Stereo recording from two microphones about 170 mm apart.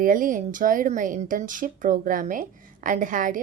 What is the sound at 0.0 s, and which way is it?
Speech, 50° right (ahead or behind).